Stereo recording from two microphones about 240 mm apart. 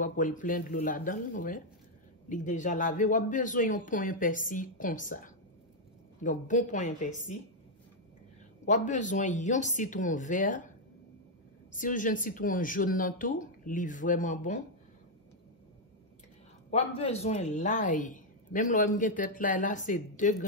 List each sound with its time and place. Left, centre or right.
0.0 s a man's voice: left
8.6 s a man's voice: left
11.7 s a man's voice: left
16.7 s a man's voice: left